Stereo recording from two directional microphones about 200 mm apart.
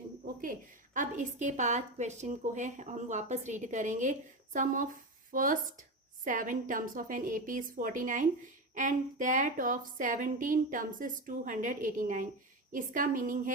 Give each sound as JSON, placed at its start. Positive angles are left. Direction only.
{"t": 0.9, "sound": "a woman's voice", "side_deg": -40}